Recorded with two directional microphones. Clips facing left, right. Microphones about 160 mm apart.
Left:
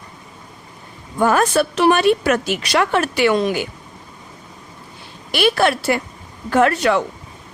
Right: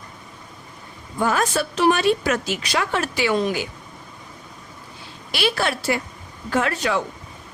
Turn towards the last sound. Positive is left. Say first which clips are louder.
# left 7 dB
turn(degrees=65)  # may be behind; listen again after turning